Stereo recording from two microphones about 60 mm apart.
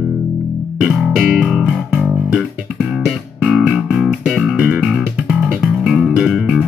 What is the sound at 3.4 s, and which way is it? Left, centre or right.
Music, right.